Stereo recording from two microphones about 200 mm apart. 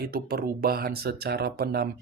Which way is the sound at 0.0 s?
50° right (ahead or behind).